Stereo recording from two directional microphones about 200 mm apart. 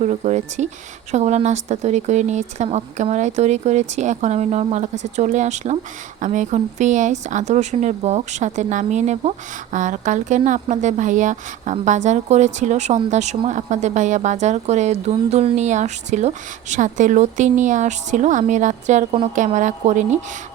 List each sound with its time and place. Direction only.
0.0 s a woman's voice: 35° right (ahead or behind)